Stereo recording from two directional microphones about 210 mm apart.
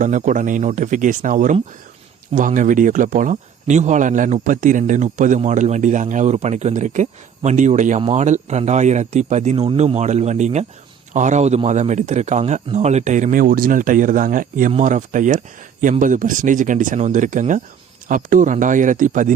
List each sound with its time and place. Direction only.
0.0 s speech: 35° right (ahead or behind)